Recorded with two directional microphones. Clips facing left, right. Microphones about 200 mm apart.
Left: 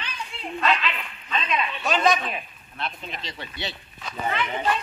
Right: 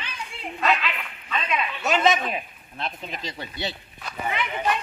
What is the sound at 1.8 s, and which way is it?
A man's voice, 25° right (ahead or behind).